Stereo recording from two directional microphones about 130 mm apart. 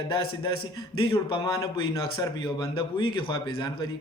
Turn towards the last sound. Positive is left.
turn(degrees=35)  # may be behind; listen again after turning